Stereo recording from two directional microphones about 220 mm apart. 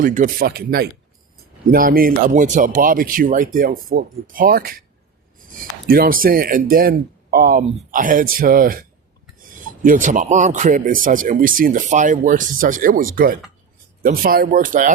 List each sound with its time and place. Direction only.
0.0 s speech: 35° right (ahead or behind)
5.9 s speech: 40° right (ahead or behind)